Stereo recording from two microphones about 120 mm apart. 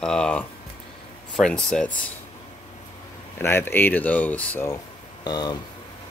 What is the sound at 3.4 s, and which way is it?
Speech, 20° left (ahead or behind).